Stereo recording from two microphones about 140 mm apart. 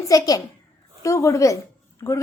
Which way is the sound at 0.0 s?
25° left (ahead or behind).